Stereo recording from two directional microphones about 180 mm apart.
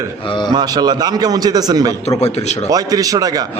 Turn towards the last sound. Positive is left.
turn(degrees=-20)  # may be behind; listen again after turning